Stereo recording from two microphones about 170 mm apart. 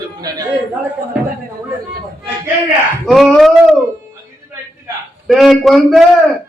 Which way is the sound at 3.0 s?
Centre (ahead or behind).